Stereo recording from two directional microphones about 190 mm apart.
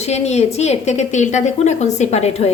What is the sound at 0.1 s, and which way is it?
A woman's voice, 35° left (ahead or behind).